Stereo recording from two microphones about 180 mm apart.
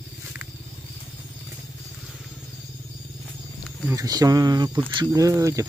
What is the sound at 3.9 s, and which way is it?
Speech, 20° right (ahead or behind).